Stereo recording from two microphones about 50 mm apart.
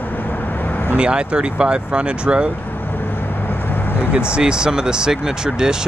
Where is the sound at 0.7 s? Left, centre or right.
Left.